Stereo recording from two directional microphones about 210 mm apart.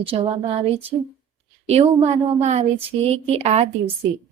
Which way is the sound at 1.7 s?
30° right (ahead or behind).